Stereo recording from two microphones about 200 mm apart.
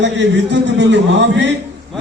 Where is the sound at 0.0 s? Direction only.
60° right (ahead or behind).